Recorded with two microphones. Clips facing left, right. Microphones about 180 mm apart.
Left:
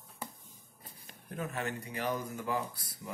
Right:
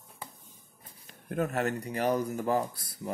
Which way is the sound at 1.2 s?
50° right (ahead or behind).